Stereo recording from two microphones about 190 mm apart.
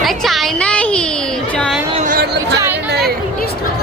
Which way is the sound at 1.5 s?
5° left (ahead or behind).